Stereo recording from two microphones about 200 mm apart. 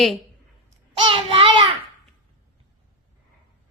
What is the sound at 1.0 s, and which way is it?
Child singing, 30° right (ahead or behind).